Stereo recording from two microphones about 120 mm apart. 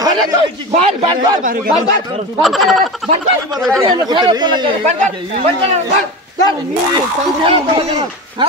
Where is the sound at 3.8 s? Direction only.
40° right (ahead or behind).